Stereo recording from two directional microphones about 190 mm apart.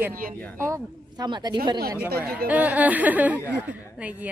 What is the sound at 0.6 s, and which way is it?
Speech, 15° right (ahead or behind).